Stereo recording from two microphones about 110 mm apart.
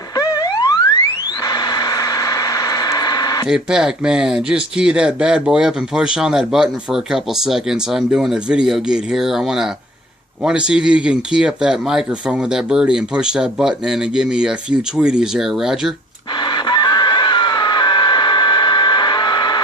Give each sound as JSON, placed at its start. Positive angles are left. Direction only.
{"t": 0.2, "sound": "a sound", "side_deg": 35}
{"t": 3.4, "sound": "speech", "side_deg": -5}
{"t": 16.4, "sound": "chicken", "side_deg": 45}